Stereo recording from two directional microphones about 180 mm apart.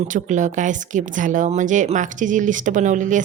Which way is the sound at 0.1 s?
45° right (ahead or behind).